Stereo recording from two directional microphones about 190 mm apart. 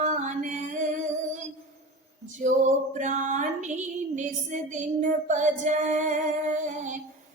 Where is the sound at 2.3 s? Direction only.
45° right (ahead or behind).